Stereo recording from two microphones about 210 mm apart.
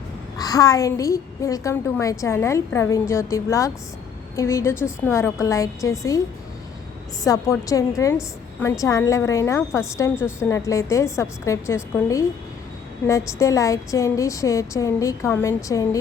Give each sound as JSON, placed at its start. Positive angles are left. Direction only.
{"t": 0.3, "sound": "a woman's voice", "side_deg": 15}
{"t": 7.3, "sound": "a woman's voice", "side_deg": 15}